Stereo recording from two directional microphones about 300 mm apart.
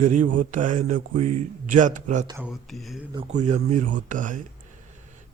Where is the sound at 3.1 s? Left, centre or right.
Right.